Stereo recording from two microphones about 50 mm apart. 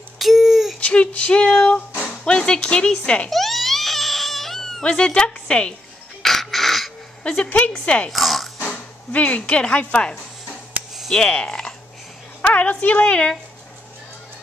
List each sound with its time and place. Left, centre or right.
0.2 s a sound: centre
0.7 s a sound: left
2.2 s speech: centre
3.3 s crying: centre
4.8 s speech: centre
6.2 s crow: centre
7.4 s speech: left
8.1 s music: centre
9.1 s speech: left
11.1 s speech: centre
12.4 s a woman's voice: left